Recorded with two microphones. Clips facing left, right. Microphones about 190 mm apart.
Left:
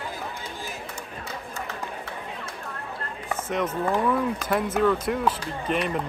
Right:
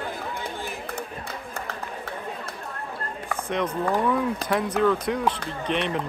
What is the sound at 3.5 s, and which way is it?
Speech, centre (ahead or behind).